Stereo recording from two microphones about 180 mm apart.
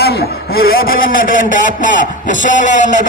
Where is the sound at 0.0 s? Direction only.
60° left (ahead or behind).